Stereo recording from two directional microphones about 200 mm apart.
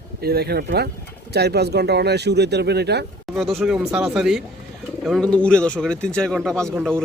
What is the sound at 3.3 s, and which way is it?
Speech, centre (ahead or behind).